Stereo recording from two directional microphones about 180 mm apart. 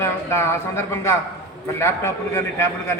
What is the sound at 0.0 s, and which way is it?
A man's voice, 15° left (ahead or behind).